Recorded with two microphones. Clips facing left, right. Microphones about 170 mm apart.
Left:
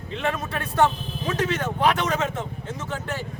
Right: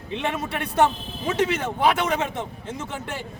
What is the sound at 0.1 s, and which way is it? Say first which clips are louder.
A man's voice: even; 20° right (ahead or behind).